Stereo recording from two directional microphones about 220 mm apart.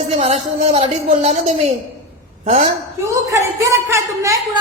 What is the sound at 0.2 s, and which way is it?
Speech, 30° right (ahead or behind).